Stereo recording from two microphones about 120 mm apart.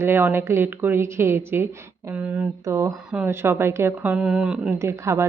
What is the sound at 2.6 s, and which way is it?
A woman's voice, 25° right (ahead or behind).